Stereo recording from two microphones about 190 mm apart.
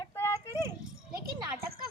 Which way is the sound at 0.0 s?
15° left (ahead or behind).